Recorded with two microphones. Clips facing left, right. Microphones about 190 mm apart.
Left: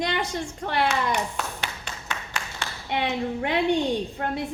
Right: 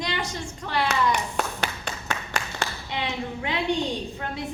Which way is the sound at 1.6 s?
40° right (ahead or behind).